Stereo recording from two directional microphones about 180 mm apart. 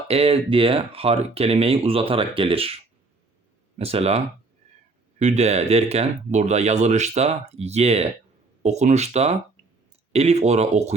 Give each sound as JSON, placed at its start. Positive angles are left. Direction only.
{"t": 0.1, "sound": "speech", "side_deg": -30}
{"t": 5.2, "sound": "speech", "side_deg": -40}